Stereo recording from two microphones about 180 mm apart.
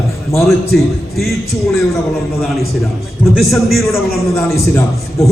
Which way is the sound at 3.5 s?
Centre (ahead or behind).